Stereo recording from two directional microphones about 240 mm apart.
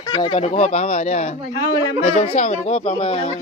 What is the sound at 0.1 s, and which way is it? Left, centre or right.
A woman's voice, centre.